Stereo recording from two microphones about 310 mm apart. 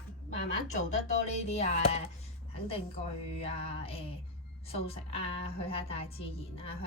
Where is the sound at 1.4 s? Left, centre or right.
Left.